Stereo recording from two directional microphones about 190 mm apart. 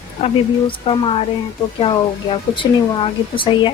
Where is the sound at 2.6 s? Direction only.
25° left (ahead or behind).